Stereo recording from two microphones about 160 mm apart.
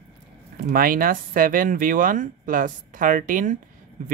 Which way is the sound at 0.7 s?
65° right (ahead or behind).